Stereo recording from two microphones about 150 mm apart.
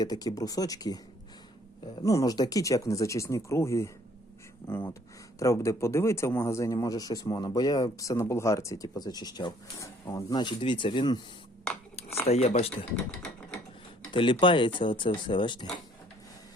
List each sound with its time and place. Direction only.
0.0 s a man's voice: 25° left (ahead or behind)
2.0 s a man's voice: 20° left (ahead or behind)
12.3 s speech: 45° left (ahead or behind)
14.1 s speech: 35° left (ahead or behind)